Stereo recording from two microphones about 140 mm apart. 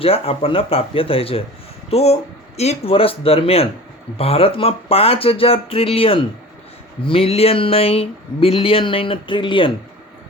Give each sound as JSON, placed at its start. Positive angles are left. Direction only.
{"t": 0.0, "sound": "speech", "side_deg": 45}